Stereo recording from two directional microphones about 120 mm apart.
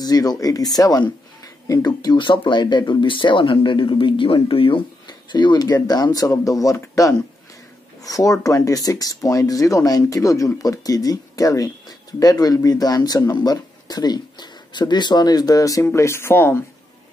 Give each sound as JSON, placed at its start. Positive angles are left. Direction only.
{"t": 0.0, "sound": "speech", "side_deg": 30}